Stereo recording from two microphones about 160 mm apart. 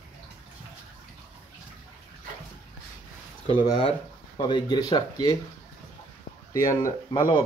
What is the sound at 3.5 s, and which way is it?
Speech, 30° left (ahead or behind).